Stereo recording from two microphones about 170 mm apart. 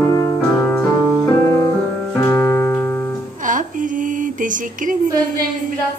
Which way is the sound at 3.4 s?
50° right (ahead or behind).